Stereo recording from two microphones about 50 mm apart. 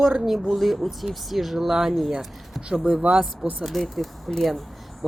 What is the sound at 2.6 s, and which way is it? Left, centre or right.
Speech, centre.